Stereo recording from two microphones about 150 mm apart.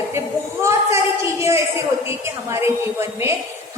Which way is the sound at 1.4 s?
20° right (ahead or behind).